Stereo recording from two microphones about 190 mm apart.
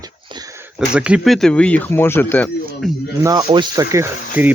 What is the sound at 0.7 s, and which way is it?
Speech, 5° right (ahead or behind).